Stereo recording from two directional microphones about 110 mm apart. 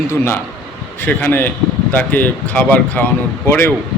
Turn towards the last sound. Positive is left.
turn(degrees=20)  # may be behind; listen again after turning